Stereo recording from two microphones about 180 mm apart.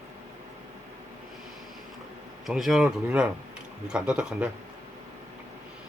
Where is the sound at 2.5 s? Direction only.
Centre (ahead or behind).